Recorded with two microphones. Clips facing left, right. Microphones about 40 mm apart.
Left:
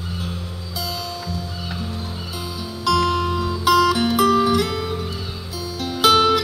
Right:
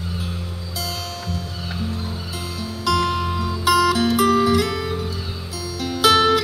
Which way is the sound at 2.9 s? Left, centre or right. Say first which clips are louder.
Left 3 dB; centre.